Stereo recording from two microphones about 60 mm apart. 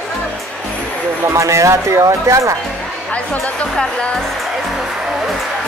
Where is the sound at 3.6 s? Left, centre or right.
Centre.